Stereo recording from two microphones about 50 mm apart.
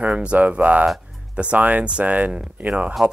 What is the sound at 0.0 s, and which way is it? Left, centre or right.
Speech, right.